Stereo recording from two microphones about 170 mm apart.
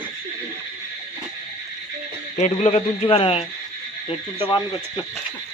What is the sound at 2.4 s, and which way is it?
A man's voice, 40° left (ahead or behind).